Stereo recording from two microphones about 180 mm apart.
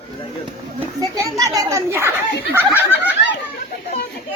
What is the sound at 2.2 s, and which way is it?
Snicker, 65° left (ahead or behind).